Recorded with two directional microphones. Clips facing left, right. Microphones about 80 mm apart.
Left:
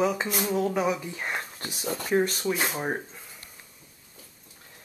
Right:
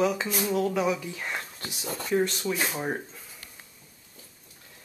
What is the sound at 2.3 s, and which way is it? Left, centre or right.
Speech, centre.